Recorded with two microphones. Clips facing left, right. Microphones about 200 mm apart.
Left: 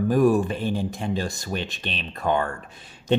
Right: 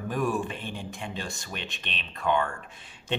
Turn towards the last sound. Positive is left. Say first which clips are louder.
# left 3 dB
turn(degrees=40)  # may be behind; listen again after turning